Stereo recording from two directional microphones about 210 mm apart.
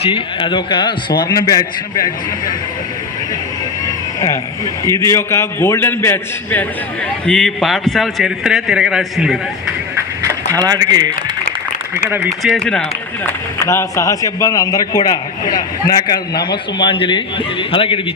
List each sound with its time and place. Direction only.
0.0 s a man's voice: 25° left (ahead or behind)
4.9 s a man's voice: 15° left (ahead or behind)
10.5 s speech: 15° right (ahead or behind)
12.4 s a man's voice: centre (ahead or behind)
13.2 s a man's voice: 15° left (ahead or behind)